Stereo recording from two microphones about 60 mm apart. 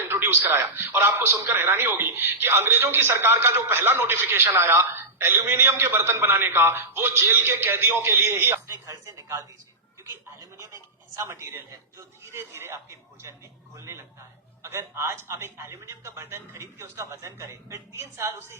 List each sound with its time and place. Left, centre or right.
0.0 s a man's voice: right
8.6 s speech: right
10.4 s a sound: right
11.3 s a man's voice: right